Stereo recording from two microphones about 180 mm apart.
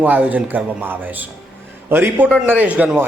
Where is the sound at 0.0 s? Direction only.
10° right (ahead or behind).